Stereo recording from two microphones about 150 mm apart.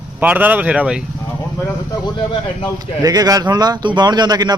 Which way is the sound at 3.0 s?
25° right (ahead or behind).